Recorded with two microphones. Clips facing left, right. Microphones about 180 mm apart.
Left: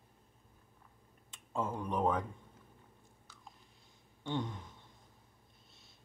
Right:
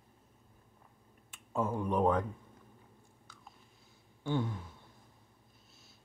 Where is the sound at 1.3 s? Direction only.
10° right (ahead or behind).